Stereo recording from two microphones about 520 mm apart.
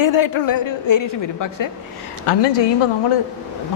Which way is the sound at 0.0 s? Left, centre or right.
Left.